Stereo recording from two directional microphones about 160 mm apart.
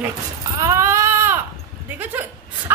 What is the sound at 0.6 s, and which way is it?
Baby cry, 20° right (ahead or behind).